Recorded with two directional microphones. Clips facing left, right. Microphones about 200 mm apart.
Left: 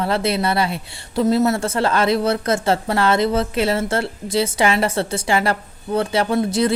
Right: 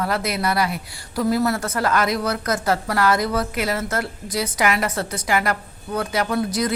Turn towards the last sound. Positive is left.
turn(degrees=25)  # may be behind; listen again after turning